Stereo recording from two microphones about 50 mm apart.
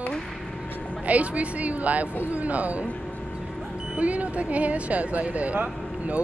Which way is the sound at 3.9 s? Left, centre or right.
Right.